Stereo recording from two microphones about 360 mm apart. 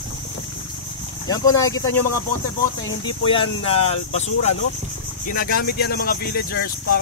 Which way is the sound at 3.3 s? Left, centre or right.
Centre.